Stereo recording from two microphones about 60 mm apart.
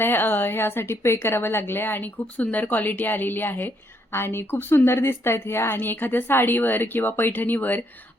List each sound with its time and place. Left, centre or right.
0.0 s a woman's voice: left